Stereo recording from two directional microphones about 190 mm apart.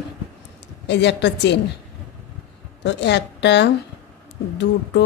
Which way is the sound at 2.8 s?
65° left (ahead or behind).